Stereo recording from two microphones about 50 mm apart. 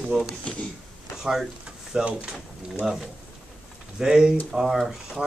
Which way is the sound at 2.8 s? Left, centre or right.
Centre.